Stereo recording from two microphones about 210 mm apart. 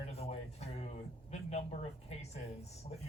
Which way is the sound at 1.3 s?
30° left (ahead or behind).